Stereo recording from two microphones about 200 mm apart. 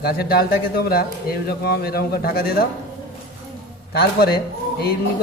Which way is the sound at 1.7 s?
50° left (ahead or behind).